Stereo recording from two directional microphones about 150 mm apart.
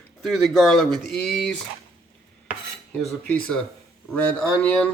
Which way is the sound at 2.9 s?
5° left (ahead or behind).